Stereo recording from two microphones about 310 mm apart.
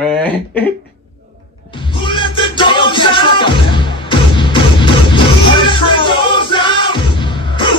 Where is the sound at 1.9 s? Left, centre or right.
Centre.